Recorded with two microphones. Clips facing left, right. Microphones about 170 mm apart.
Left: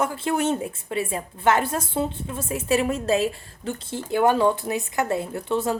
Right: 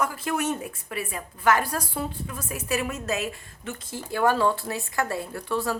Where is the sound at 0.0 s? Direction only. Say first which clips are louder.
Left 4 dB; 25° left (ahead or behind).